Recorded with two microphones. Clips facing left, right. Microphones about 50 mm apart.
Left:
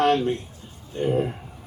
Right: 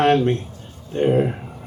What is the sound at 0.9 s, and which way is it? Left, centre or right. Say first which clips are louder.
Speech: right 6 dB; right.